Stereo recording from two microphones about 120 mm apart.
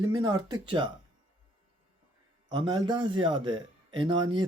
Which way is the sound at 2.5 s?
40° right (ahead or behind).